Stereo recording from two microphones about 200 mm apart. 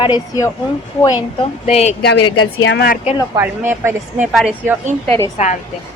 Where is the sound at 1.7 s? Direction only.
30° left (ahead or behind).